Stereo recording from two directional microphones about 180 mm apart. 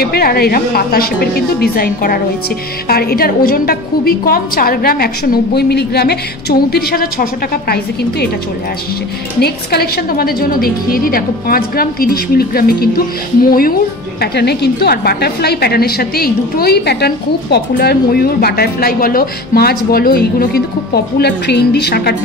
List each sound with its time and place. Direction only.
0.0 s a woman's voice: 60° left (ahead or behind)
9.4 s a woman's voice: 60° left (ahead or behind)
14.2 s a woman's voice: 65° left (ahead or behind)